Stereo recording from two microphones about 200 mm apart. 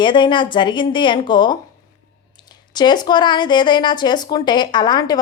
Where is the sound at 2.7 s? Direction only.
20° left (ahead or behind).